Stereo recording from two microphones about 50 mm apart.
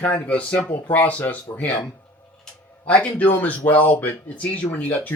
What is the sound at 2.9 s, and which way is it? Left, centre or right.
Speech, left.